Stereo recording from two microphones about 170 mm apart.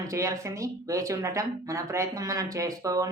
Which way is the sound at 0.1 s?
20° right (ahead or behind).